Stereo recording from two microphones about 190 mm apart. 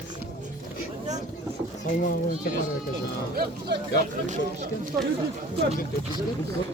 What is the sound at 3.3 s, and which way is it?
Speech, 60° right (ahead or behind).